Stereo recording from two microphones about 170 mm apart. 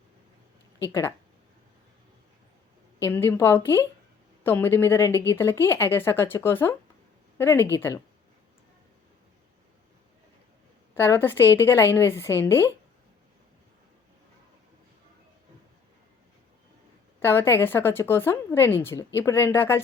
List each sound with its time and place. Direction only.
0.8 s speech: 15° left (ahead or behind)
3.0 s speech: 15° left (ahead or behind)
10.9 s speech: 15° left (ahead or behind)
17.2 s speech: 15° left (ahead or behind)